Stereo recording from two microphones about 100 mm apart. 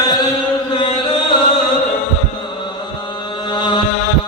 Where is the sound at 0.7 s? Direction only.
65° left (ahead or behind).